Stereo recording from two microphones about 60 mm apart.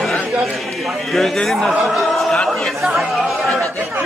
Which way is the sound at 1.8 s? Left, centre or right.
Centre.